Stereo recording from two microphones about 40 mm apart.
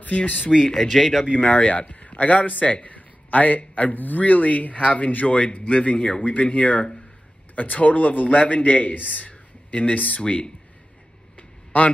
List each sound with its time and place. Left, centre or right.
0.0 s speech: left
0.7 s speech: centre
1.4 s a man's voice: left
10.2 s speech: left
11.3 s a sound: left